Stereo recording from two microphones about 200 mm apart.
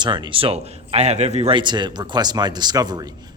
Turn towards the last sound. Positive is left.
turn(degrees=-20)  # may be behind; listen again after turning